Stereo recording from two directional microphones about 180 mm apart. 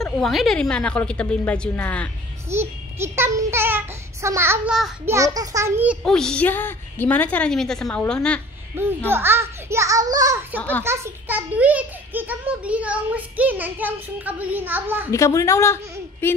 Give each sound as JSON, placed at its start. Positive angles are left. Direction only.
{"t": 0.0, "sound": "a woman's voice", "side_deg": 0}
{"t": 2.5, "sound": "a child's voice", "side_deg": -15}
{"t": 6.0, "sound": "a woman's voice", "side_deg": 5}
{"t": 8.7, "sound": "a child's voice", "side_deg": -10}
{"t": 15.0, "sound": "a woman's voice", "side_deg": 15}